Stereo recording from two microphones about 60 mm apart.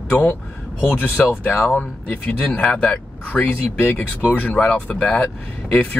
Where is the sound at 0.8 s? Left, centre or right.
Left.